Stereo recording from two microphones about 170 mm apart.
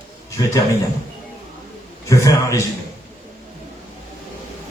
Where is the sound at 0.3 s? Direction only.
20° left (ahead or behind).